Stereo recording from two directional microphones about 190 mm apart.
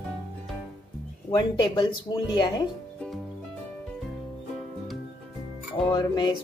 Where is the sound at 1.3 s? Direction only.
20° left (ahead or behind).